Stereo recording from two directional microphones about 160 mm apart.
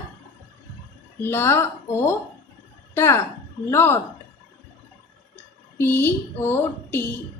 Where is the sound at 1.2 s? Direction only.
15° left (ahead or behind).